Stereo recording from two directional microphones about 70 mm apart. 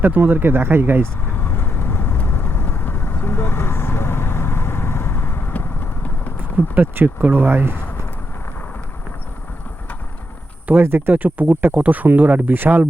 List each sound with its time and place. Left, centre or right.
0.0 s speech: right
1.4 s vehicle: left
6.7 s speech: right
10.7 s speech: right